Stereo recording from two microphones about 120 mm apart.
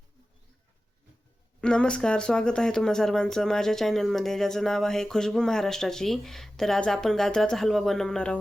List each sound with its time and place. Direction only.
1.6 s speech: 10° left (ahead or behind)